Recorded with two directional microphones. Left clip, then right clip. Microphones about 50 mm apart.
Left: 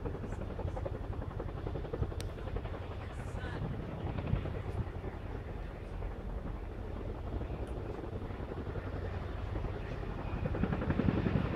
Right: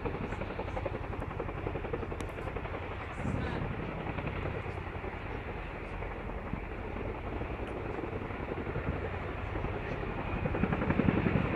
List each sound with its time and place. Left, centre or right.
10.3 s helicopter: centre